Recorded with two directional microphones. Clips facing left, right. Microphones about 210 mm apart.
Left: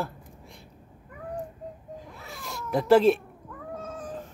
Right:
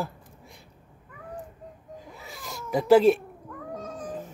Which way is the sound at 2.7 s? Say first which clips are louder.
Right 1 dB; centre (ahead or behind).